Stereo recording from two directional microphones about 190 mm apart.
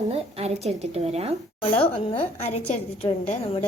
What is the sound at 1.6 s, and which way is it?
A woman's voice, 30° left (ahead or behind).